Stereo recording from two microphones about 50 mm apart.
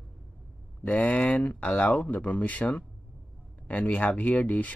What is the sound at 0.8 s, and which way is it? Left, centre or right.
Speech, left.